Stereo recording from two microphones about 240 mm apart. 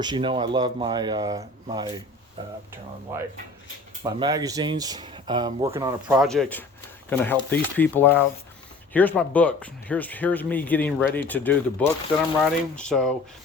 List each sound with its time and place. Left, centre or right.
0.0 s speech: centre
3.1 s speech: centre